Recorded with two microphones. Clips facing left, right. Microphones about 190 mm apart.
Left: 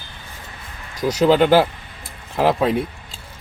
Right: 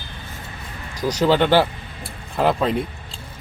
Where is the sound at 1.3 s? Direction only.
10° left (ahead or behind).